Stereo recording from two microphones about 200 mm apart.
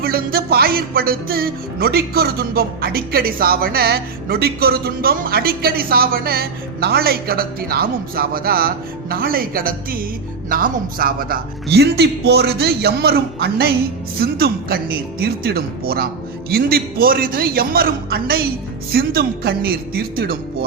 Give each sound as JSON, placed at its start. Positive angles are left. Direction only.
{"t": 0.0, "sound": "speech", "side_deg": -50}